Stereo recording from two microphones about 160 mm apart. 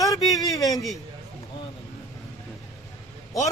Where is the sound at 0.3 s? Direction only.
20° left (ahead or behind).